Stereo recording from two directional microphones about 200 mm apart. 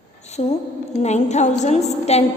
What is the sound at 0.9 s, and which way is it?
A woman's voice, 35° left (ahead or behind).